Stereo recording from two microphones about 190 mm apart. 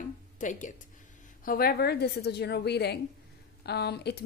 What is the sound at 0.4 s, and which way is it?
Speech, 40° left (ahead or behind).